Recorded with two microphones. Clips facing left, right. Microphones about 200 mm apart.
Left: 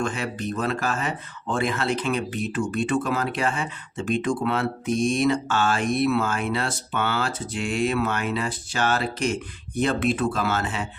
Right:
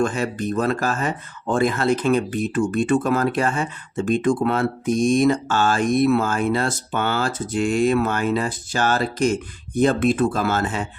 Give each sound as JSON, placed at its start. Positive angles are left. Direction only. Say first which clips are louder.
{"t": 0.0, "sound": "speech", "louder": "right 5 dB", "side_deg": -45}